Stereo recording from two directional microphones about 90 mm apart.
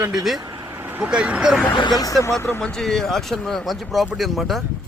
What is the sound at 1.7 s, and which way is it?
Speech, 65° left (ahead or behind).